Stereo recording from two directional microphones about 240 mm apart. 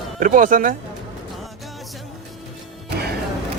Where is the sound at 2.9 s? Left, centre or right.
Right.